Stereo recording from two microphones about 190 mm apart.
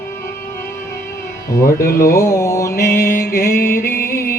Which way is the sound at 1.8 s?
50° left (ahead or behind).